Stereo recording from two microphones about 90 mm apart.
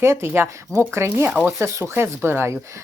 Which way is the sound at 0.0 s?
30° right (ahead or behind).